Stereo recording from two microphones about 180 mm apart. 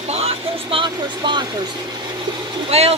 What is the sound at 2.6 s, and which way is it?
Speech, 35° right (ahead or behind).